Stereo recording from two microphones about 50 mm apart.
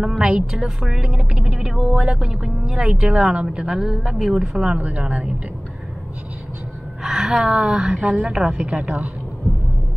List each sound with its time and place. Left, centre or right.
0.3 s a woman's voice: centre
7.0 s a woman's voice: centre; by 9.1 s right